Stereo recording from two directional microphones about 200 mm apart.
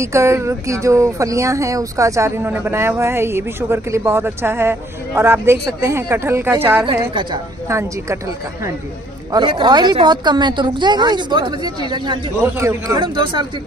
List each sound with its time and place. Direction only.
0.0 s speech: 15° right (ahead or behind)
6.8 s a woman's voice: 25° right (ahead or behind)
7.6 s speech: 15° right (ahead or behind)
9.3 s a woman's voice: 25° right (ahead or behind)